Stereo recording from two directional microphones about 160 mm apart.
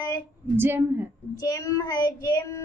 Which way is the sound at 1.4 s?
20° left (ahead or behind).